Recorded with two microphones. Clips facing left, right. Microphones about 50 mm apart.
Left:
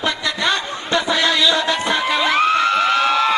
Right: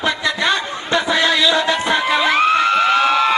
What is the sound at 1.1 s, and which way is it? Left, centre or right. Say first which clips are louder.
Music: right 2 dB; centre.